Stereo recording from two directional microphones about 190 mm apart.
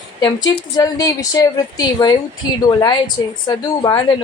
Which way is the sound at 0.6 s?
20° left (ahead or behind).